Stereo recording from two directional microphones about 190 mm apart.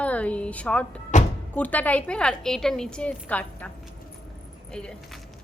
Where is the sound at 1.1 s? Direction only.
40° left (ahead or behind).